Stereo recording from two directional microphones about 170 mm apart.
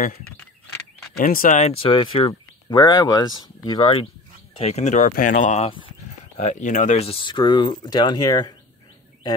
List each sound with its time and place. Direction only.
1.1 s speech: 55° left (ahead or behind)
1.9 s speech: 30° left (ahead or behind)
4.6 s speech: 40° left (ahead or behind); by 8.5 s 25° left (ahead or behind)